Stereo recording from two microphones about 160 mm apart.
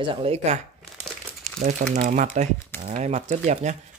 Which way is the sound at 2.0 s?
55° right (ahead or behind).